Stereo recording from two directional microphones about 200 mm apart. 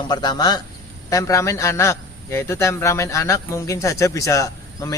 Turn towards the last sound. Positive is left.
turn(degrees=15)  # may be behind; listen again after turning